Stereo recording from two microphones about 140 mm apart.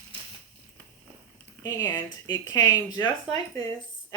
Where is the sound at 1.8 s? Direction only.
25° left (ahead or behind).